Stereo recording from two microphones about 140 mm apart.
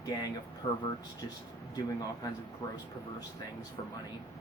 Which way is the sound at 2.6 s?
25° left (ahead or behind).